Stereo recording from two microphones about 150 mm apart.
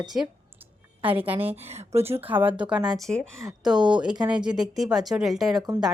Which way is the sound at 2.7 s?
Centre (ahead or behind).